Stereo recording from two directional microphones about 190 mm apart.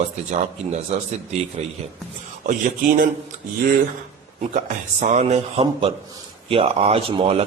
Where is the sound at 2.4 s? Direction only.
45° right (ahead or behind).